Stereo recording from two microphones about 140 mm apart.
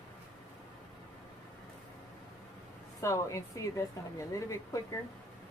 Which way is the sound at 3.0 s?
20° left (ahead or behind).